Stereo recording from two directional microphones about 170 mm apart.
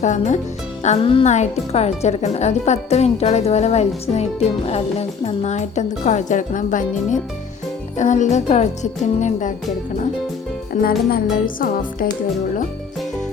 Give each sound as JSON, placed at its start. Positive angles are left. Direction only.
{"t": 0.0, "sound": "speech", "side_deg": 45}
{"t": 10.7, "sound": "music", "side_deg": 60}